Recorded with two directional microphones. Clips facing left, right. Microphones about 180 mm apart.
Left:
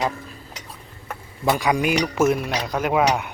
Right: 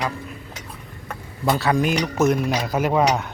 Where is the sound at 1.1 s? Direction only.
10° left (ahead or behind).